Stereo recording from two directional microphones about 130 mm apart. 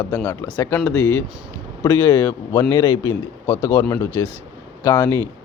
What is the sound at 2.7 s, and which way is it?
Speech, 30° left (ahead or behind).